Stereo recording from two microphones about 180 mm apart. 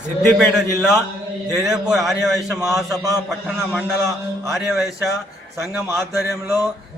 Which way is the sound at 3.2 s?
Centre (ahead or behind).